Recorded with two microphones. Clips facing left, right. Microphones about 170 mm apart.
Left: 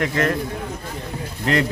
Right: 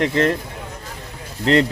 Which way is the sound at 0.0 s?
25° right (ahead or behind).